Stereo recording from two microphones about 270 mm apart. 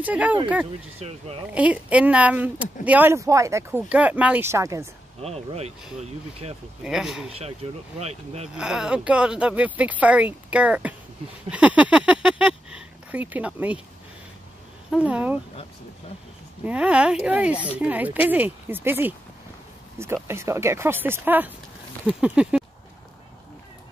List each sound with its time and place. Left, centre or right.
0.0 s speech: centre
0.9 s speech: right
1.5 s speech: centre
5.2 s speech: right
6.8 s speech: centre
7.3 s speech: right
8.5 s speech: centre
11.5 s a sound: centre
13.1 s speech: centre
14.9 s speech: centre
16.6 s speech: centre
20.2 s speech: centre